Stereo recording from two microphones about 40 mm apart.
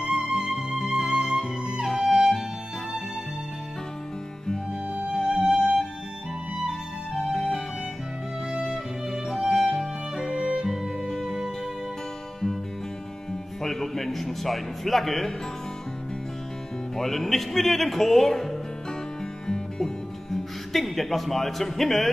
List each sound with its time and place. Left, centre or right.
0.0 s music: centre
5.1 s music: centre
7.3 s music: centre
8.6 s music: centre
10.4 s music: centre
13.6 s speech: centre
16.9 s speech: centre
19.4 s music: centre